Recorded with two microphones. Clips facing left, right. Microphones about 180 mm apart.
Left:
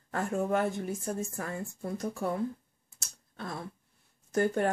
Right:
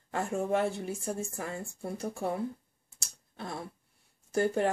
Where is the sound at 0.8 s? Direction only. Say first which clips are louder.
Left 1 dB; 10° right (ahead or behind).